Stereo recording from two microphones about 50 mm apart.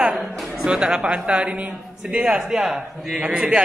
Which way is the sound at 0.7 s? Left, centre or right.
Centre.